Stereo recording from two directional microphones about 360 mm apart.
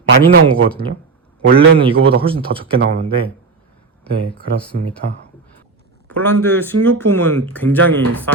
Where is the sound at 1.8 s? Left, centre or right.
Centre.